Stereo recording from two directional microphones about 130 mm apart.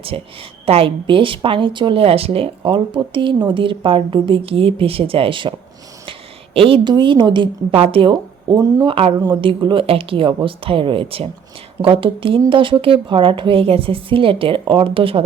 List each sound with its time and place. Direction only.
0.1 s a woman's voice: 50° right (ahead or behind); by 9.4 s 25° right (ahead or behind)
9.4 s a woman's voice: 40° right (ahead or behind)